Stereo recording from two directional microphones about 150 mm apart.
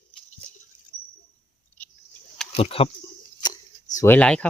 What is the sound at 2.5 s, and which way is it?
Speech, 40° left (ahead or behind).